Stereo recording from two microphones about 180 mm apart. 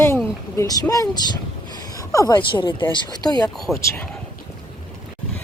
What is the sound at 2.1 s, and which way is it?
Speech, 20° left (ahead or behind).